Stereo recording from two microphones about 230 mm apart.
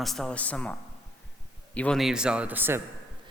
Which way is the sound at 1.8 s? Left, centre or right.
Centre.